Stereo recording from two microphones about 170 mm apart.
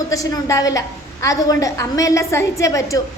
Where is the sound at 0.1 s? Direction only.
20° left (ahead or behind).